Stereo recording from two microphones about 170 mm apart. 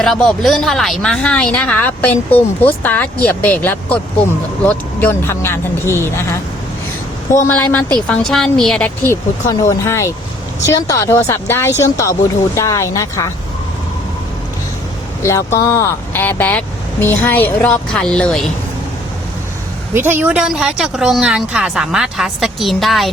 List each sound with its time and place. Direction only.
0.0 s a woman's voice: 5° left (ahead or behind)
7.4 s a woman's voice: 10° left (ahead or behind)
9.5 s speech: 20° left (ahead or behind)
15.2 s speech: 15° left (ahead or behind)
19.9 s a woman's voice: 10° right (ahead or behind)